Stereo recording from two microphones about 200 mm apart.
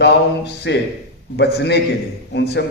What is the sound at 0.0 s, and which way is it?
A man's voice, 55° left (ahead or behind).